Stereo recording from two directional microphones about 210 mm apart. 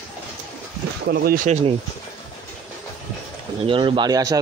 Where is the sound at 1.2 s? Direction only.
40° right (ahead or behind).